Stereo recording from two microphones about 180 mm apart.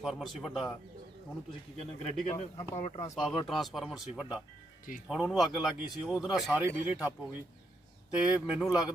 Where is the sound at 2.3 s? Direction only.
35° left (ahead or behind).